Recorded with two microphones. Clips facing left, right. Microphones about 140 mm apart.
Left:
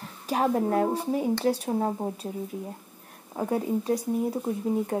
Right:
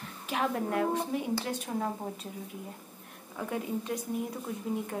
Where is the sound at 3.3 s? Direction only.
35° left (ahead or behind).